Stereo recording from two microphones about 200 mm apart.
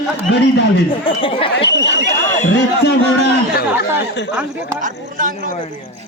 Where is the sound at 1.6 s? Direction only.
60° left (ahead or behind).